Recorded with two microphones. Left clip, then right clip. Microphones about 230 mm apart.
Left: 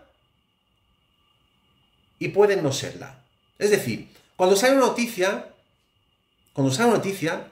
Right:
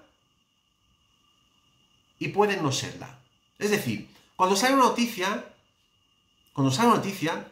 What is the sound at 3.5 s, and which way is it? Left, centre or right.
Speech, right.